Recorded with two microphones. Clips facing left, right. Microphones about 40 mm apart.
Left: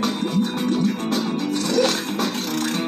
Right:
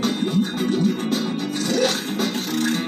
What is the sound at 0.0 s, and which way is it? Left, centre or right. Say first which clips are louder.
Music: even; right.